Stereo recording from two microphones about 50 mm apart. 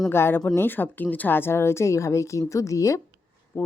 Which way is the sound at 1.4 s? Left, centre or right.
Left.